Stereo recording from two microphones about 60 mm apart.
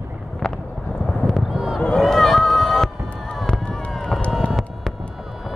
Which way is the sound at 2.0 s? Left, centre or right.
Centre.